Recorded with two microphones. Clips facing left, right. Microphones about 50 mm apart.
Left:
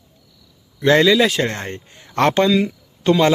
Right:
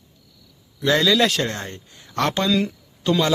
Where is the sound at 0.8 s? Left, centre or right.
Left.